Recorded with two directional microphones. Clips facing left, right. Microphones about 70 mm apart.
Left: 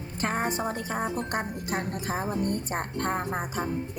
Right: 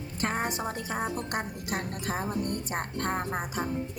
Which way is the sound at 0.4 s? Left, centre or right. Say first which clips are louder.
Left 3 dB; left.